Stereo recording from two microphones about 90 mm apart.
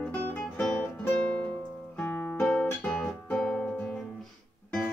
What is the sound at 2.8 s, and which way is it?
Music, 10° left (ahead or behind).